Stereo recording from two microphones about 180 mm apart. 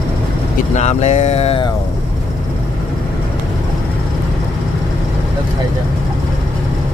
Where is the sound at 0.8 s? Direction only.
40° left (ahead or behind).